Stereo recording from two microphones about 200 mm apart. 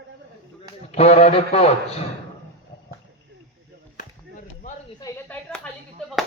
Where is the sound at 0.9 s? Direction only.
30° left (ahead or behind).